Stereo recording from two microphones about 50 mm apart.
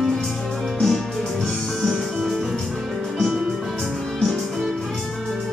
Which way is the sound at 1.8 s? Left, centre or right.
Centre.